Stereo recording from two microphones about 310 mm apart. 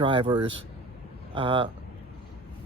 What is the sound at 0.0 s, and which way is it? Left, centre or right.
Speech, centre.